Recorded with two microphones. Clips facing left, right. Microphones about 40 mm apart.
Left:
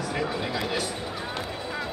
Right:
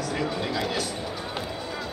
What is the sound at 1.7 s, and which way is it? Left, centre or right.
Music, left.